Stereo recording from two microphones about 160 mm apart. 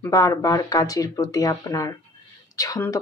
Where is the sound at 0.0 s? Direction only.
20° left (ahead or behind).